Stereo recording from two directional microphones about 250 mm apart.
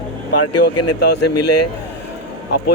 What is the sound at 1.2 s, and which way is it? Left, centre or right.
Speech, left.